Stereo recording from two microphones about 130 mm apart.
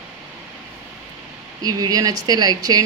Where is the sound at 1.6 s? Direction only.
30° right (ahead or behind).